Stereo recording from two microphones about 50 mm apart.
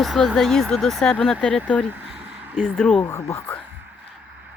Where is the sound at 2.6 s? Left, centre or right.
Centre.